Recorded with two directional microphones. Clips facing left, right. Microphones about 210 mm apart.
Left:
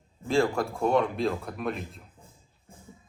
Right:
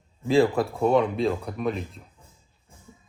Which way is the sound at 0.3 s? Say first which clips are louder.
Right 5 dB; centre (ahead or behind).